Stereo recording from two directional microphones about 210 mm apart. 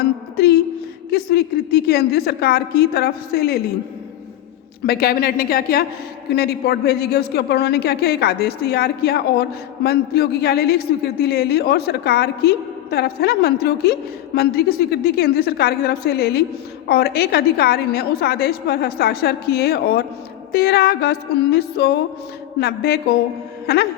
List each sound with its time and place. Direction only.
1.1 s a man's voice: 50° left (ahead or behind)
4.8 s a man's voice: 45° left (ahead or behind)
23.6 s music: 50° left (ahead or behind)